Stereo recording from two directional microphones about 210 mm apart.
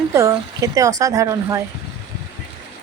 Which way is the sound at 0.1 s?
15° right (ahead or behind).